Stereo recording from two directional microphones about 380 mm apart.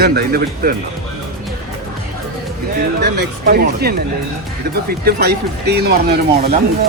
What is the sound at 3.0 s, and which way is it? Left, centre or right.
Speech, right.